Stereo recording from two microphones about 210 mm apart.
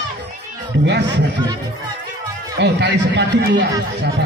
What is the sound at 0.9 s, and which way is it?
Speech, 55° right (ahead or behind).